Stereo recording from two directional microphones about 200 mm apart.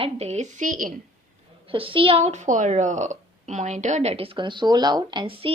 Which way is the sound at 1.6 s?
25° right (ahead or behind).